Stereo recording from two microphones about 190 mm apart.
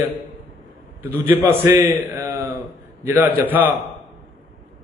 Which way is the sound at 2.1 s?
15° right (ahead or behind).